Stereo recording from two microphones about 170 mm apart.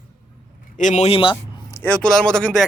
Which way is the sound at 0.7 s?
45° left (ahead or behind).